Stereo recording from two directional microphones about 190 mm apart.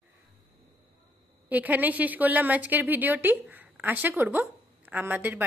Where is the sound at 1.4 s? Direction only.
10° right (ahead or behind).